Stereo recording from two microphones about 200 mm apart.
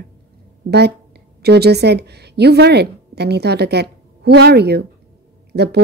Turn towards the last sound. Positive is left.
turn(degrees=-55)  # may be behind; listen again after turning